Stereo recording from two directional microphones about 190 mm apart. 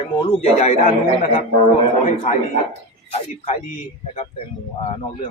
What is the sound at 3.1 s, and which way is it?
Speech, 35° left (ahead or behind).